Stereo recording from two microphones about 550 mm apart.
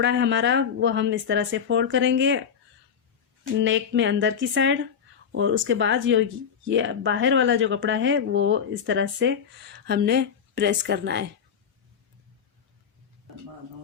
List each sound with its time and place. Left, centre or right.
0.0 s speech: centre
3.6 s speech: centre